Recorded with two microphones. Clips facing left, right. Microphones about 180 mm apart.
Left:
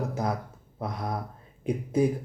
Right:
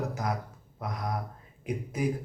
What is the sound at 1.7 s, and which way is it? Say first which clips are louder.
Speech: left 6 dB; 30° left (ahead or behind).